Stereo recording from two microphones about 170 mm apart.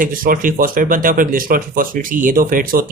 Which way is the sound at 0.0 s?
55° right (ahead or behind).